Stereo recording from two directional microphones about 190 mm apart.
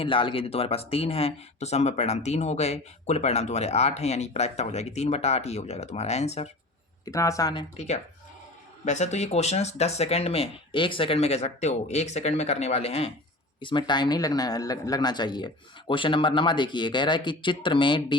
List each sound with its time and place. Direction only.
0.0 s speech: 25° left (ahead or behind)
7.0 s speech: 15° left (ahead or behind)
8.8 s speech: 35° left (ahead or behind)